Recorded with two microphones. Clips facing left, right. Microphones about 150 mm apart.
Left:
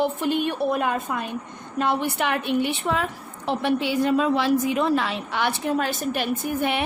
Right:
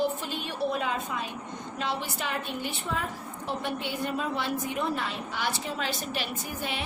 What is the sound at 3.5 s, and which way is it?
A woman's voice, 85° left.